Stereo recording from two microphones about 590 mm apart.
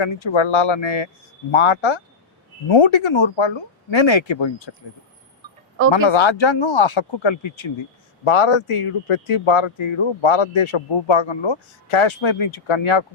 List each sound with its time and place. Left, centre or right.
0.0 s speech: left
5.9 s speech: left